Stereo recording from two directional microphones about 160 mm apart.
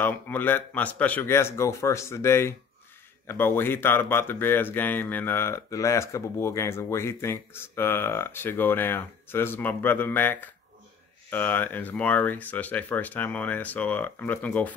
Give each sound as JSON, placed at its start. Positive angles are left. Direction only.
{"t": 0.0, "sound": "speech", "side_deg": 10}